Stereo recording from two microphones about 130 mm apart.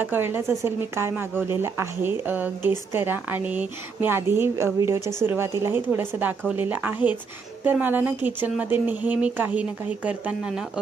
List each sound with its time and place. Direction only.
0.0 s a woman's voice: 15° right (ahead or behind)